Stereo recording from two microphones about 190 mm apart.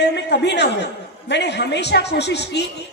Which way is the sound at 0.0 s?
65° left (ahead or behind).